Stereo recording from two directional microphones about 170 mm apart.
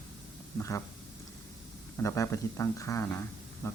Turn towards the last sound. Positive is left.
turn(degrees=15)  # may be behind; listen again after turning